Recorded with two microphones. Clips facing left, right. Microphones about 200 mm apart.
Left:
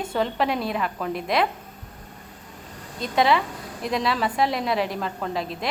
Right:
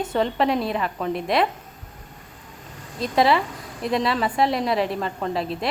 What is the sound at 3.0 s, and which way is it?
A woman's voice, centre (ahead or behind).